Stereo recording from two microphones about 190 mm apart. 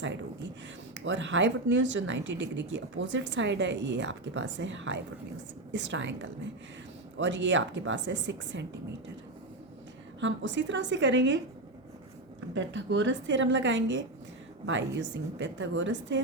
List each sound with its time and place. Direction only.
0.9 s speech: 75° right (ahead or behind)
10.2 s speech: 75° right (ahead or behind)
12.5 s speech: 75° right (ahead or behind)